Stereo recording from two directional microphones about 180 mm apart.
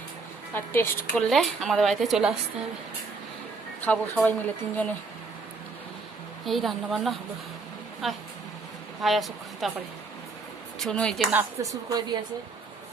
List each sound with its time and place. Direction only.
0.5 s speech: 15° left (ahead or behind)
1.3 s a woman's voice: centre (ahead or behind)
3.8 s speech: 10° left (ahead or behind)
6.4 s a woman's voice: centre (ahead or behind)
10.8 s a woman's voice: 5° left (ahead or behind)
11.3 s a woman's voice: 20° right (ahead or behind)